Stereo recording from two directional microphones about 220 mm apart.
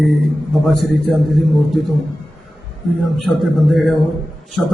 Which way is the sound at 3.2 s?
Centre (ahead or behind).